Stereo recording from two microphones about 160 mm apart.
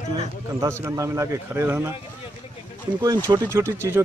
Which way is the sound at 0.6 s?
20° right (ahead or behind).